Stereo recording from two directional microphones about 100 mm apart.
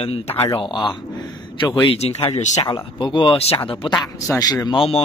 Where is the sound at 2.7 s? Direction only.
50° left (ahead or behind).